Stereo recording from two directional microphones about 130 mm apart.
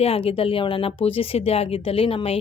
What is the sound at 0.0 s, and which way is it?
Speech, 50° left (ahead or behind).